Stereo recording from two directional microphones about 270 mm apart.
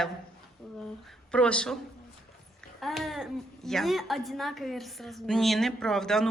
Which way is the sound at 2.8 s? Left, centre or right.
Centre.